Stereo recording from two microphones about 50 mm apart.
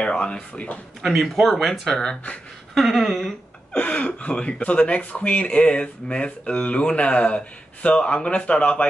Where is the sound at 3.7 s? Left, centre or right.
Left.